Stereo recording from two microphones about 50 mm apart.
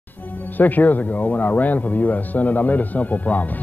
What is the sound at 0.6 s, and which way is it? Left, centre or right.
Speech, left.